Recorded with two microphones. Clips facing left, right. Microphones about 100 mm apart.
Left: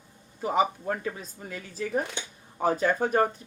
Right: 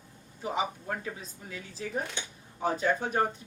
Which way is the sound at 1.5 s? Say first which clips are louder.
Left 5 dB; 55° left (ahead or behind).